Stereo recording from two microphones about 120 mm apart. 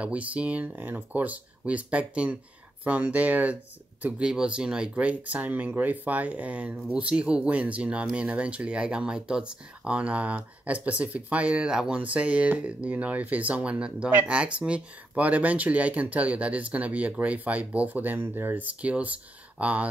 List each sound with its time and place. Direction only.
0.0 s speech: 10° right (ahead or behind)